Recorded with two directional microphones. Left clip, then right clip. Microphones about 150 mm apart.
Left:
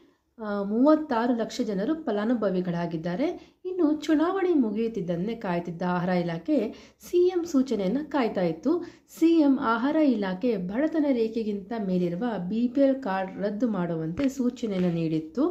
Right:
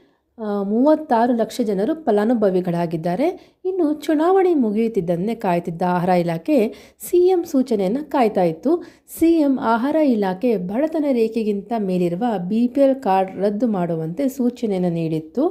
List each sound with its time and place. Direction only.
0.4 s a woman's voice: 45° right (ahead or behind)
3.8 s a woman's voice: 40° right (ahead or behind); by 13.7 s 55° right (ahead or behind)
13.7 s a woman's voice: 45° right (ahead or behind)